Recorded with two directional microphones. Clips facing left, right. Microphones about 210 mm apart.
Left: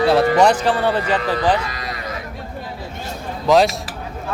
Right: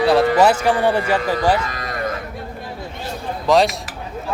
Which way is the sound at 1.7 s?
50° right (ahead or behind).